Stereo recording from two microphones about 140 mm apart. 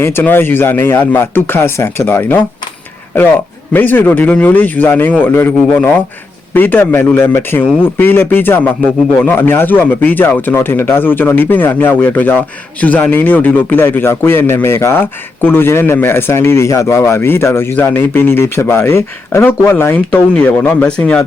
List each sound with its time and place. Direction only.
0.0 s a man's voice: 15° left (ahead or behind)
3.7 s a man's voice: 15° left (ahead or behind)